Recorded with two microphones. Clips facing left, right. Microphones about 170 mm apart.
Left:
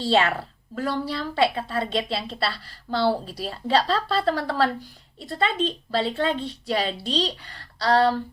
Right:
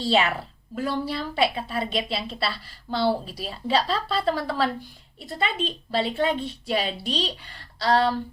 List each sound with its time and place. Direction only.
0.0 s speech: 15° right (ahead or behind)